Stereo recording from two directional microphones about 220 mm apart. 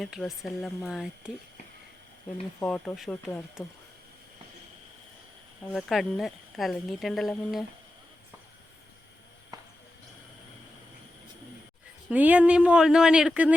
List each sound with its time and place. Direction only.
0.0 s a woman's voice: centre (ahead or behind)
2.6 s a woman's voice: 5° left (ahead or behind)
5.7 s a woman's voice: centre (ahead or behind)
9.5 s walk: 15° right (ahead or behind)
12.0 s a woman's voice: 5° right (ahead or behind)